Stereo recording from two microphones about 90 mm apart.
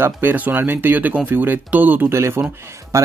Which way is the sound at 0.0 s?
20° right (ahead or behind).